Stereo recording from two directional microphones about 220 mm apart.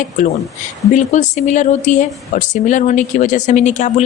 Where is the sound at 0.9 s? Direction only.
35° left (ahead or behind).